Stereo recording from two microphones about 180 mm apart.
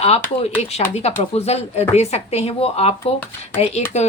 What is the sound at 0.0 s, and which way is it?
Speech, 35° left (ahead or behind).